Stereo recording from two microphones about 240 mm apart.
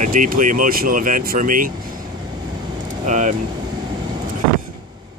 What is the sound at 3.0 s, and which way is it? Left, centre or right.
Speech, right.